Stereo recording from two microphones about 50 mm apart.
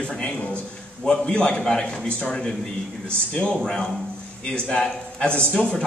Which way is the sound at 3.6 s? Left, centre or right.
Centre.